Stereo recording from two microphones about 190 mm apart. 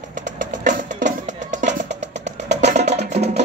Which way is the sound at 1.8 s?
65° right (ahead or behind).